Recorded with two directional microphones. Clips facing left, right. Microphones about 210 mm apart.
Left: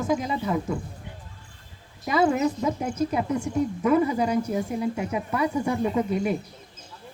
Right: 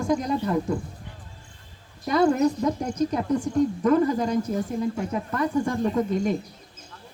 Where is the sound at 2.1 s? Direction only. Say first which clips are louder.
Right 2 dB; 5° left (ahead or behind).